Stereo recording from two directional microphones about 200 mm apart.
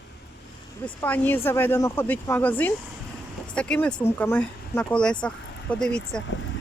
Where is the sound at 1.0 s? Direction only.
10° left (ahead or behind).